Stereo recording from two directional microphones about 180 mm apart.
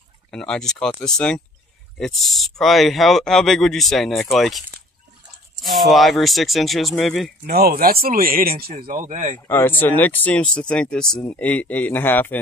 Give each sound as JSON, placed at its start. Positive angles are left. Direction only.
{"t": 0.3, "sound": "speech", "side_deg": 5}
{"t": 7.4, "sound": "speech", "side_deg": -60}
{"t": 9.5, "sound": "speech", "side_deg": 10}